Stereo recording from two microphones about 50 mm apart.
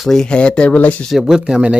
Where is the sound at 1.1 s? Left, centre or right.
Centre.